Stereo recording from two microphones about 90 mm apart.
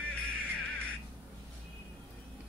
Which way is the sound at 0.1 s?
15° left (ahead or behind).